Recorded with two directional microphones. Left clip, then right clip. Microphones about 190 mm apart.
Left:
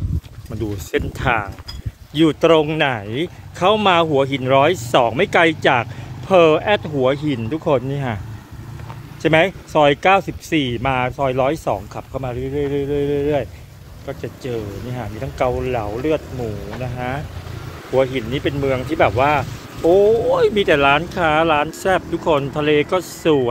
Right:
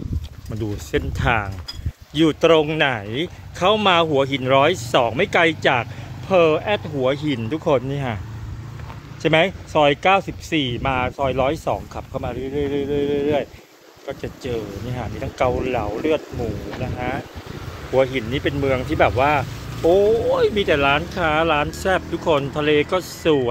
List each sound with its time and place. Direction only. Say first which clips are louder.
0.6 s speech: left 2 dB; centre (ahead or behind); by 7.2 s 20° left (ahead or behind)
7.2 s speech: left 1 dB; 5° left (ahead or behind)
9.2 s speech: left 2 dB; 15° left (ahead or behind)
19.9 s speech: left 3 dB; 15° left (ahead or behind)